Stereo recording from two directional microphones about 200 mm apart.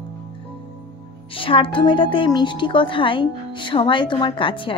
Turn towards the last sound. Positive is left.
turn(degrees=25)  # may be behind; listen again after turning